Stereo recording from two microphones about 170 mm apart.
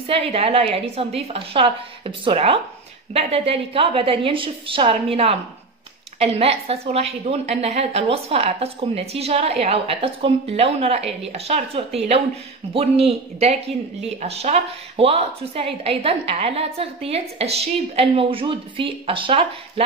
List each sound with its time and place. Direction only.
0.0 s speech: 35° right (ahead or behind)